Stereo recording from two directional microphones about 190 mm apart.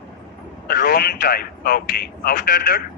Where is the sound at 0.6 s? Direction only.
50° left (ahead or behind).